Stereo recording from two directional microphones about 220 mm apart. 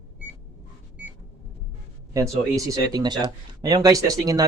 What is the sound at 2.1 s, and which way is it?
Speech, 15° right (ahead or behind).